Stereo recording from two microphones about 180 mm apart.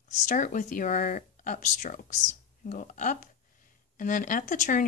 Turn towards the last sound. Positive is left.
turn(degrees=45)  # may be behind; listen again after turning